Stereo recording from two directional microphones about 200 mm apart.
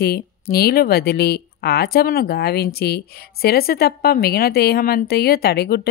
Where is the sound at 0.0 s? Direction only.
50° left (ahead or behind).